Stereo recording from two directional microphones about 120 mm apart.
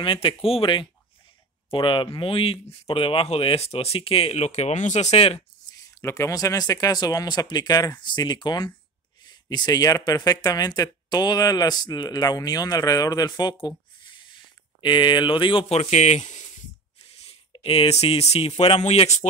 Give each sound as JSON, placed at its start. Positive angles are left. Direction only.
{"t": 0.0, "sound": "speech", "side_deg": 45}
{"t": 5.7, "sound": "speech", "side_deg": 25}
{"t": 15.7, "sound": "speech", "side_deg": 65}
{"t": 17.3, "sound": "speech", "side_deg": 50}